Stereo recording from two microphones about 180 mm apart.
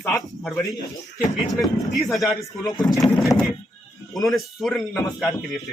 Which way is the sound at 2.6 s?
20° left (ahead or behind).